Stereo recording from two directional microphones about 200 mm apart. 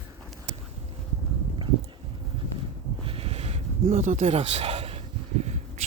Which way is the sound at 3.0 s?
30° right (ahead or behind).